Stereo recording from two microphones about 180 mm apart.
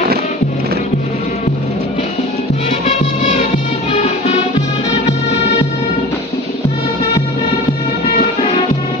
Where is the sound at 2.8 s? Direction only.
40° left (ahead or behind).